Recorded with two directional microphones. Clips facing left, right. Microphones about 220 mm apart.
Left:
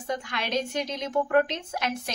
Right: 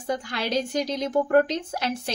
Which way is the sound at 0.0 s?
35° right (ahead or behind).